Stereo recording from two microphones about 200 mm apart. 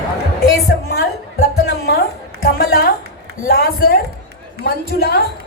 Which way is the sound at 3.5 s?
50° left (ahead or behind).